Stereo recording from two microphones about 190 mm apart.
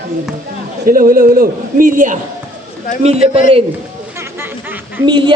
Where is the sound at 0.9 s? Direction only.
50° right (ahead or behind).